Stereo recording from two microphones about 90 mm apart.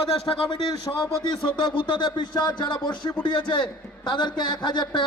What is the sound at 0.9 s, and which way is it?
Speech, 40° left (ahead or behind).